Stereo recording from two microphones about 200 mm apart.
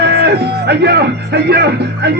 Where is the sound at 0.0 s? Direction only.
55° right (ahead or behind).